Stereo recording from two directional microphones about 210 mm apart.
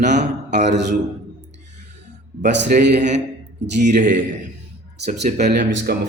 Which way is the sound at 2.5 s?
55° right (ahead or behind).